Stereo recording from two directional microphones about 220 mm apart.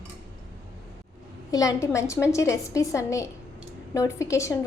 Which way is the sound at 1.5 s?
15° left (ahead or behind).